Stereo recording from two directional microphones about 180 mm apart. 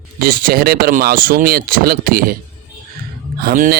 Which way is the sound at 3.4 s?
50° right (ahead or behind).